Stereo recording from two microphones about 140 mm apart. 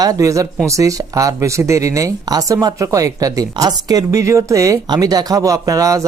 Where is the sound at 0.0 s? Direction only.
25° right (ahead or behind).